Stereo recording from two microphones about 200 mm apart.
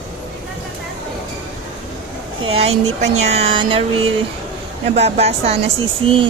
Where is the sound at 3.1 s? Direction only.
35° right (ahead or behind).